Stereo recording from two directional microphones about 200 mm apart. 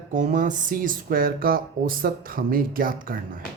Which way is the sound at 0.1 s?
40° right (ahead or behind).